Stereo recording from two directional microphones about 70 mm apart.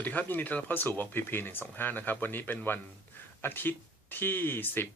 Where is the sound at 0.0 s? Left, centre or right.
Left.